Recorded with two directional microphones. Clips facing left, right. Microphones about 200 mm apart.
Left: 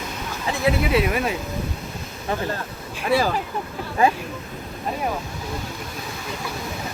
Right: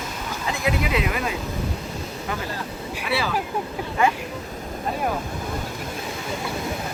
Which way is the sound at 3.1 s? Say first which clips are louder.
Left 6 dB; 45° left (ahead or behind).